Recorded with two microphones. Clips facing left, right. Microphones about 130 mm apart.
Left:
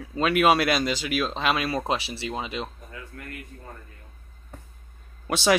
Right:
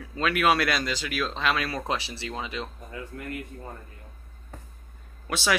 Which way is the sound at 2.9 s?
30° right (ahead or behind).